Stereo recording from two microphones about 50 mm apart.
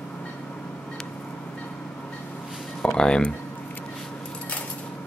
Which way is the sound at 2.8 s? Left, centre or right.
Centre.